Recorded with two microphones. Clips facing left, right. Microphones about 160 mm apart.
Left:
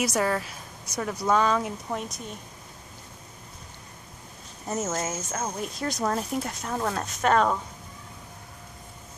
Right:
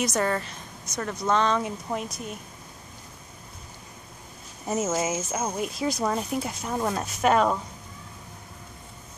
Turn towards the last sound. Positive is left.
turn(degrees=-10)  # may be behind; listen again after turning